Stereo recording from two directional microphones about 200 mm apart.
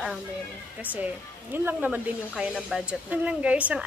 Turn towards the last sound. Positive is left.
turn(degrees=-5)  # may be behind; listen again after turning